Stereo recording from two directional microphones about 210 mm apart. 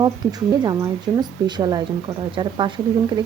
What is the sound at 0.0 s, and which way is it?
Speech, 20° right (ahead or behind).